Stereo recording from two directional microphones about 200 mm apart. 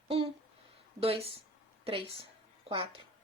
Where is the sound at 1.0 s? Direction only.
30° right (ahead or behind).